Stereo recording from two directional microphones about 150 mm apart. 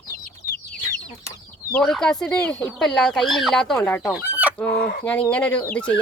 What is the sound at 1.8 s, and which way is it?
Speech, 5° left (ahead or behind).